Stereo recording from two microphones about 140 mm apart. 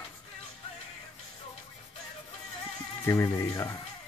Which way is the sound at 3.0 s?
20° left (ahead or behind).